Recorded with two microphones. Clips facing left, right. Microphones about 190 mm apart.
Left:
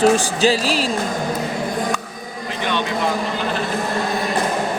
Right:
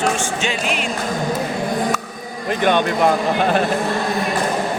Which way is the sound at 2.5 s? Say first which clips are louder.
Right 7 dB; 50° right (ahead or behind).